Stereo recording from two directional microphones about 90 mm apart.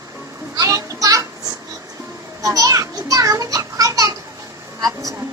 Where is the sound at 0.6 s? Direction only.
40° right (ahead or behind).